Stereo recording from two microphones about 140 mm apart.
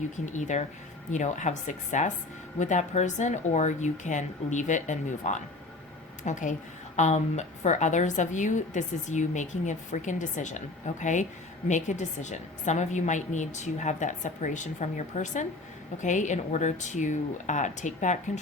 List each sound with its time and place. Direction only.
0.3 s a woman's voice: 60° left (ahead or behind)